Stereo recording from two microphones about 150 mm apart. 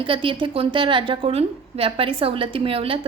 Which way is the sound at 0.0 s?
35° right (ahead or behind).